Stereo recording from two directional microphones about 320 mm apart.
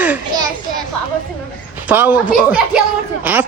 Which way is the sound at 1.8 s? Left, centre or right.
Centre.